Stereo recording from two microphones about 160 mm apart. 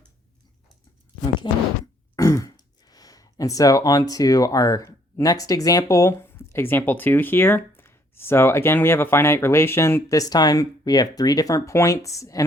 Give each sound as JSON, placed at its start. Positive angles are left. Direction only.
{"t": 1.4, "sound": "speech", "side_deg": 30}